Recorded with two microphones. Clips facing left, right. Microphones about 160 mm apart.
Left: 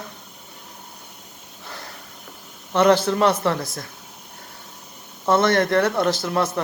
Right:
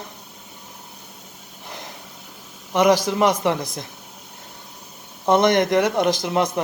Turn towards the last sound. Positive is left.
turn(degrees=-20)  # may be behind; listen again after turning